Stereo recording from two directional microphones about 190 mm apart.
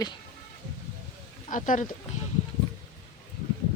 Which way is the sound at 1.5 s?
45° left (ahead or behind).